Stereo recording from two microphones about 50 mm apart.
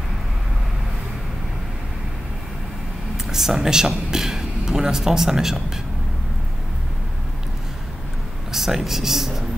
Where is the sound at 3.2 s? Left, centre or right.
Centre.